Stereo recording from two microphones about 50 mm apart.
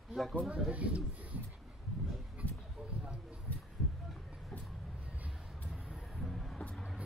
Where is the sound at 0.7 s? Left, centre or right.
Right.